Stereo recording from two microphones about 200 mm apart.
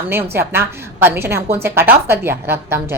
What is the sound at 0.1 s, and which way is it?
A woman's voice, 10° right (ahead or behind).